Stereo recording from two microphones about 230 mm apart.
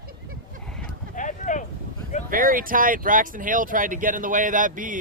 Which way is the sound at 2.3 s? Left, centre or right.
Right.